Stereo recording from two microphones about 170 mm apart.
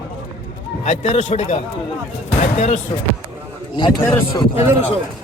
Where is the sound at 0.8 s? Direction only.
45° left (ahead or behind).